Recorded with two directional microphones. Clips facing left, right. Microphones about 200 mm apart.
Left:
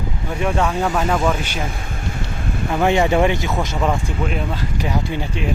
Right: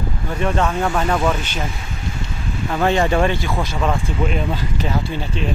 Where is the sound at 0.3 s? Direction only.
10° left (ahead or behind).